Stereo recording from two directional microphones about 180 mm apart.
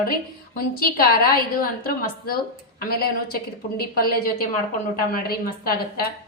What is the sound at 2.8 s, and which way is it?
A woman's voice, 55° left (ahead or behind).